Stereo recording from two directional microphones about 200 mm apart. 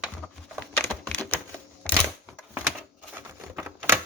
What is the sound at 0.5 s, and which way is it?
Typing, 5° left (ahead or behind).